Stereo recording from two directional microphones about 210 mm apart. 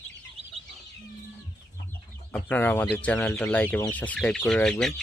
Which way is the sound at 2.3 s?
10° left (ahead or behind).